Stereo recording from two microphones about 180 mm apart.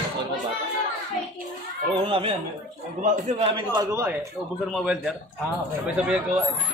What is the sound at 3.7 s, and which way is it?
Speech, 15° right (ahead or behind).